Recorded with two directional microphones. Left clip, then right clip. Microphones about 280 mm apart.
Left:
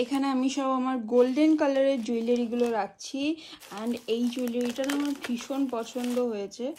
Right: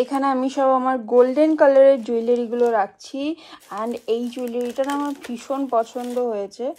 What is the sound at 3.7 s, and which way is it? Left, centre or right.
Speech, right.